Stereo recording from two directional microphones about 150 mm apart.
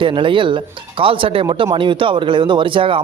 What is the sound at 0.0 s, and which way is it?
A man's voice, 35° right (ahead or behind).